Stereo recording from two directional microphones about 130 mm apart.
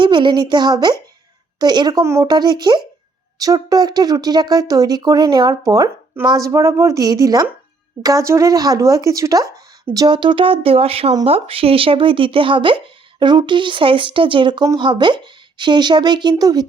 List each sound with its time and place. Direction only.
0.0 s speech: 35° right (ahead or behind)